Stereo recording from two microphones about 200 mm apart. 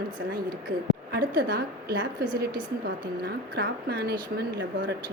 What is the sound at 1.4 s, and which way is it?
A woman's voice, 55° right (ahead or behind).